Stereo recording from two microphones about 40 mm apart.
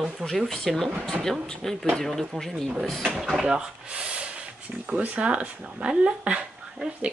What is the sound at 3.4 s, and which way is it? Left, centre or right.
Speech, right.